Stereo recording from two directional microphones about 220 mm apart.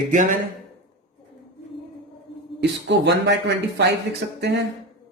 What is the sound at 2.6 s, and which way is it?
Speech, 55° right (ahead or behind).